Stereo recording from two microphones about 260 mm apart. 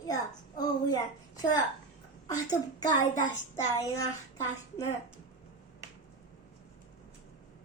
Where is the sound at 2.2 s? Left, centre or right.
Centre.